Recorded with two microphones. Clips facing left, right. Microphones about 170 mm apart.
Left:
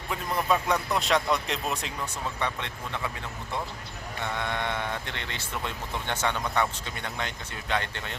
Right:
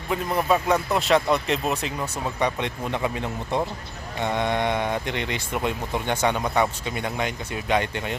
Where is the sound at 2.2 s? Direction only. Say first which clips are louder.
Right 7 dB; 15° right (ahead or behind).